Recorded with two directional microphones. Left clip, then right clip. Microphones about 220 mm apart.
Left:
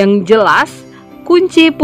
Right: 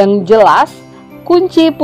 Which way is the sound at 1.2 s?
55° left (ahead or behind).